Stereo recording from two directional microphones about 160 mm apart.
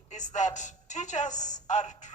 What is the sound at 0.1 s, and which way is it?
A woman's voice, 50° left (ahead or behind).